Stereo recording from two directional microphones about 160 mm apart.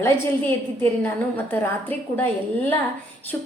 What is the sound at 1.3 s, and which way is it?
Speech, 15° left (ahead or behind).